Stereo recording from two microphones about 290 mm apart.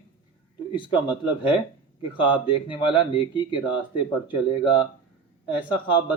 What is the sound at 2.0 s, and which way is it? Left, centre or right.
A man's voice, centre.